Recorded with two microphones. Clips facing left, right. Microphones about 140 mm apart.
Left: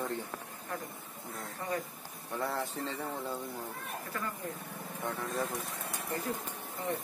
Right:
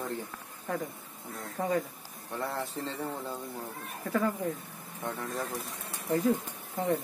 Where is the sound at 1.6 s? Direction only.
90° right.